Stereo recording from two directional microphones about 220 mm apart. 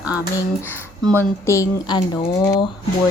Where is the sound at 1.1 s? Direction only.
10° left (ahead or behind).